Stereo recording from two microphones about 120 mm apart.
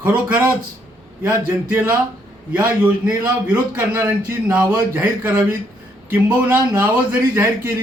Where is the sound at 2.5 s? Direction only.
15° right (ahead or behind).